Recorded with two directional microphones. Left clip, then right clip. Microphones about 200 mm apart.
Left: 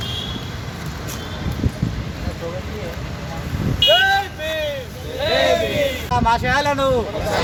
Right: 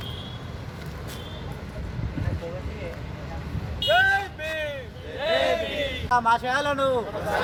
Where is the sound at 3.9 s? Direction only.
10° left (ahead or behind).